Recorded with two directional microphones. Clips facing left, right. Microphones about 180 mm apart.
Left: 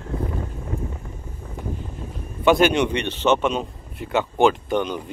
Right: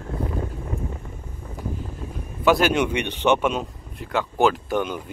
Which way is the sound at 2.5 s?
Centre (ahead or behind).